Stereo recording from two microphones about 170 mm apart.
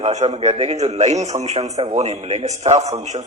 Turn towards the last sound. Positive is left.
turn(degrees=-40)  # may be behind; listen again after turning